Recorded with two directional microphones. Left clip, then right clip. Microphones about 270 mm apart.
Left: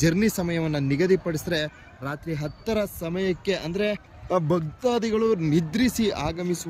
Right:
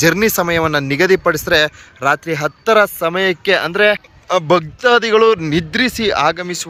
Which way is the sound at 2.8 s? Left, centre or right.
Right.